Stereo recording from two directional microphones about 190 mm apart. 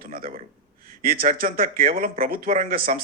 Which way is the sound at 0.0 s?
50° right (ahead or behind).